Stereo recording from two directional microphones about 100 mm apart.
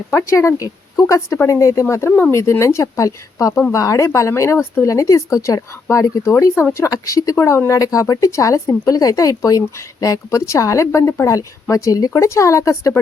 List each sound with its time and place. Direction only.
0.1 s speech: 30° left (ahead or behind)